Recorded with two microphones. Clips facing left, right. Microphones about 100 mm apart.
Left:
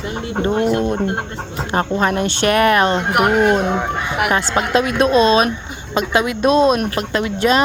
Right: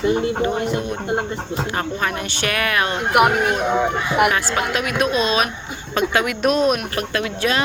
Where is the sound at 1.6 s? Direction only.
25° left (ahead or behind).